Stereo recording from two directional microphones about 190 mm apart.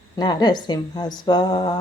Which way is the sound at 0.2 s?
20° left (ahead or behind).